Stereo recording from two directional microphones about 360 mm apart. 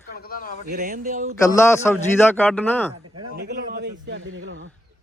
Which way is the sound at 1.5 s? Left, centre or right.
Centre.